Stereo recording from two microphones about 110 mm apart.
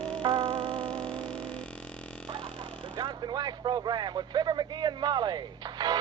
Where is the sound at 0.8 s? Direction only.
10° left (ahead or behind).